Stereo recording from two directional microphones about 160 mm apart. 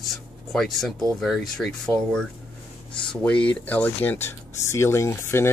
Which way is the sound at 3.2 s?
10° left (ahead or behind).